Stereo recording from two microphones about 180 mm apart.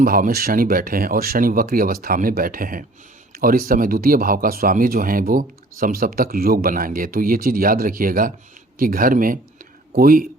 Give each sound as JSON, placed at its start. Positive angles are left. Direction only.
{"t": 0.0, "sound": "speech", "side_deg": -50}